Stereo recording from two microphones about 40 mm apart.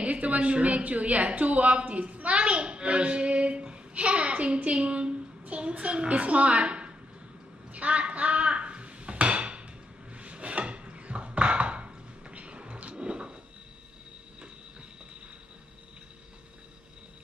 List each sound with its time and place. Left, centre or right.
0.0 s a woman's voice: right
7.7 s dishes: right
10.1 s a sound: right